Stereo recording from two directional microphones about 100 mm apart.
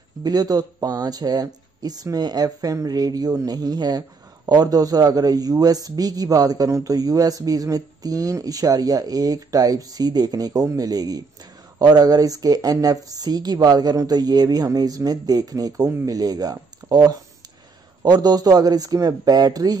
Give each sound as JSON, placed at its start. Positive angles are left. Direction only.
{"t": 0.2, "sound": "a man's voice", "side_deg": -40}